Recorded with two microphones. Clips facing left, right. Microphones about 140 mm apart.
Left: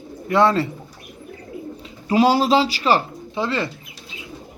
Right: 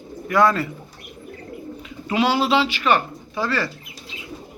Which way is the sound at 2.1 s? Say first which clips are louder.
Left 4 dB; 40° left (ahead or behind).